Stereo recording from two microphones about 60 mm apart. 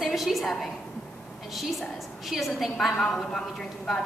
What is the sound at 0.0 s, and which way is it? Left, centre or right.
A woman's voice, centre.